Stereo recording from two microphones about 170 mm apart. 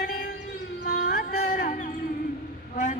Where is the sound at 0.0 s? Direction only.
60° left (ahead or behind).